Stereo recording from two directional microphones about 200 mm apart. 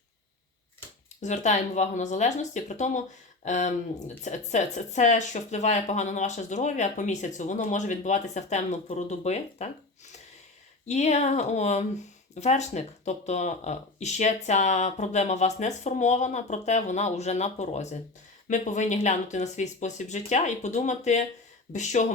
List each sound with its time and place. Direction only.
1.2 s speech: 35° left (ahead or behind)
10.8 s speech: 35° left (ahead or behind)